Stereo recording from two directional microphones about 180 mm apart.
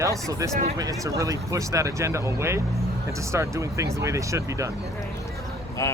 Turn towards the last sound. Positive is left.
turn(degrees=20)  # may be behind; listen again after turning